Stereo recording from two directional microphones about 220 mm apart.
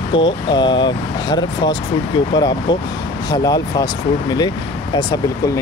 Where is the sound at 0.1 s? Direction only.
20° left (ahead or behind).